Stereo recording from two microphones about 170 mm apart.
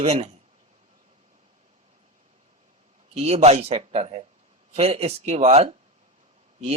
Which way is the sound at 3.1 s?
40° right (ahead or behind).